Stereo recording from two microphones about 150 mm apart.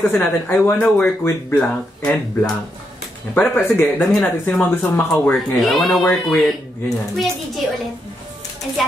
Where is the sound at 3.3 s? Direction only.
15° left (ahead or behind).